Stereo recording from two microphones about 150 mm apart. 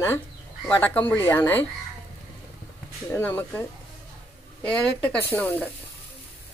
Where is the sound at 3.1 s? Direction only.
15° left (ahead or behind).